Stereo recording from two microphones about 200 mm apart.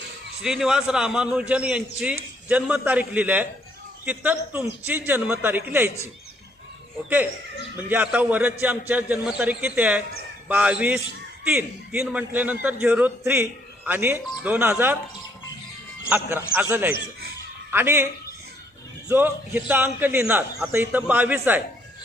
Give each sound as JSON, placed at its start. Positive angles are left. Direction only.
{"t": 0.4, "sound": "a man's voice", "side_deg": -5}
{"t": 7.9, "sound": "a man's voice", "side_deg": -10}
{"t": 16.0, "sound": "a man's voice", "side_deg": -10}